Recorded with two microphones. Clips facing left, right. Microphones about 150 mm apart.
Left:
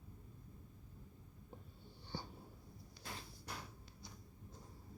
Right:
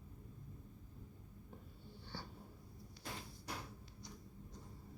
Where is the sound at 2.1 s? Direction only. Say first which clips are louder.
Left 3 dB; 15° left (ahead or behind).